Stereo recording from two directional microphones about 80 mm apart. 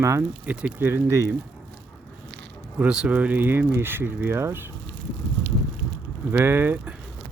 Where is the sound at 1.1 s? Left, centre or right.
Right.